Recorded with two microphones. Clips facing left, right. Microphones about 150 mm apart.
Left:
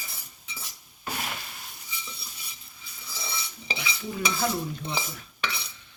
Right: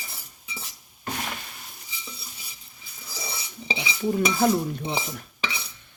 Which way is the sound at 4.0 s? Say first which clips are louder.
Right 8 dB; 45° right (ahead or behind).